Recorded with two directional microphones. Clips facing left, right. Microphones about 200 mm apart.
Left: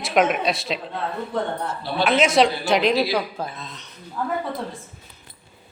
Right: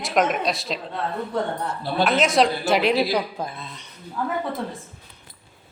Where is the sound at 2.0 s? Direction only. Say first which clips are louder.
Left 2 dB; centre (ahead or behind).